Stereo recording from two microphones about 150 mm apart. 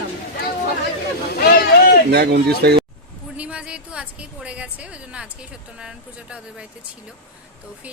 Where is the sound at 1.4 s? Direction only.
90° left.